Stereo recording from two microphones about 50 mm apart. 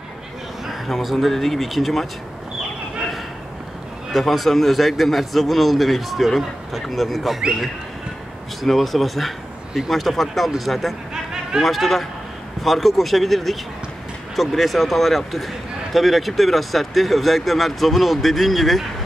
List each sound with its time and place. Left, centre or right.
0.7 s a man's voice: centre
4.1 s a man's voice: centre
8.6 s a man's voice: centre